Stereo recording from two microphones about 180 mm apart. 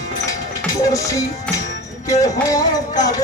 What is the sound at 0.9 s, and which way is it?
Music, 20° left (ahead or behind).